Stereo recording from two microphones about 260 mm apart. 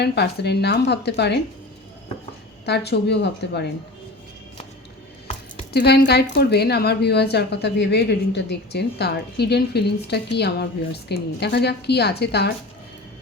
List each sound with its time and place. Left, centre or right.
0.0 s a woman's voice: left
2.6 s a woman's voice: left
5.7 s a woman's voice: left